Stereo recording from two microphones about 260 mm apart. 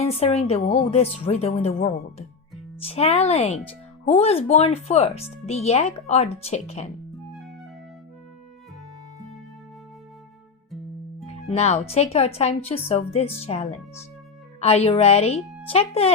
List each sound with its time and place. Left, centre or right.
0.0 s speech: left
11.4 s speech: left